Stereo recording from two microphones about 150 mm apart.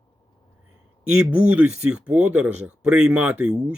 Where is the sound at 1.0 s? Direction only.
10° right (ahead or behind).